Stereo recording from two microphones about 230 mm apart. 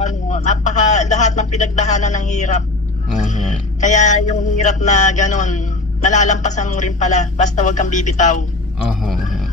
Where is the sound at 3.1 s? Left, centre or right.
Left.